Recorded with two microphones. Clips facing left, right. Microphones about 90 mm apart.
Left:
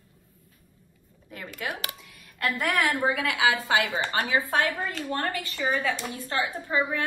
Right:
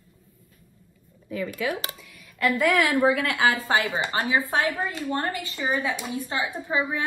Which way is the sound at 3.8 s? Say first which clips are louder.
Right 1 dB; 25° right (ahead or behind).